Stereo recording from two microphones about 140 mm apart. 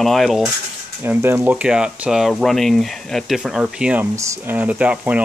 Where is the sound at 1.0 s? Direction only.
15° right (ahead or behind).